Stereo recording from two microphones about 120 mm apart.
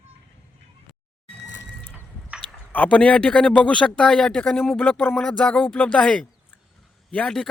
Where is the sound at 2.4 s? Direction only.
40° right (ahead or behind).